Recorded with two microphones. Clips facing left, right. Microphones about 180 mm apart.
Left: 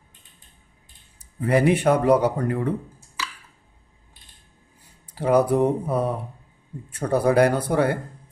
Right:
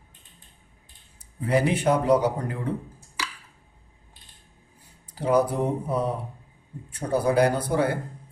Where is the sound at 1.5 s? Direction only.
60° left (ahead or behind).